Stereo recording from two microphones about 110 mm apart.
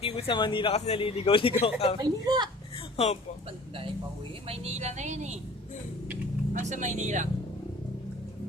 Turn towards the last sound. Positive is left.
turn(degrees=-90)